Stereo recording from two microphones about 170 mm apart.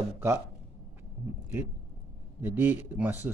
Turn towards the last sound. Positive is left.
turn(degrees=-10)  # may be behind; listen again after turning